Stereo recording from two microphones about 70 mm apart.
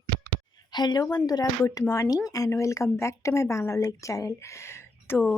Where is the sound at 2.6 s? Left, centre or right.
Left.